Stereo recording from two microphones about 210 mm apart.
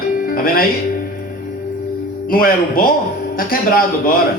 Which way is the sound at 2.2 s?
45° left (ahead or behind).